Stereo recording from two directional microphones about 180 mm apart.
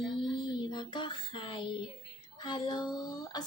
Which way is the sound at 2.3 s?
25° left (ahead or behind).